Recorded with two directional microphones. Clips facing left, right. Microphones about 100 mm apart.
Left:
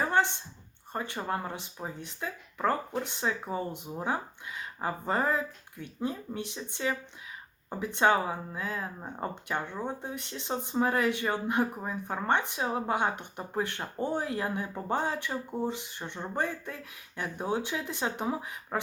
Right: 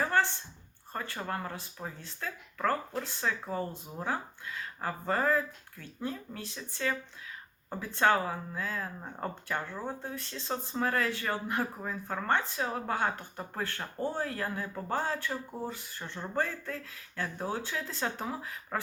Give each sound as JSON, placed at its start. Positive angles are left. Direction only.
{"t": 0.0, "sound": "a sound", "side_deg": 20}
{"t": 0.9, "sound": "speech", "side_deg": 20}
{"t": 7.9, "sound": "speech", "side_deg": 20}